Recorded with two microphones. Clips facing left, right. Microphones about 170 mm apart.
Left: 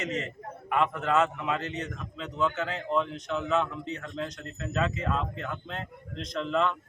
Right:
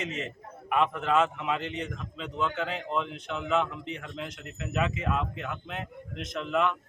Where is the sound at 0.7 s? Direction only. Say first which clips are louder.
Even; 15° right (ahead or behind).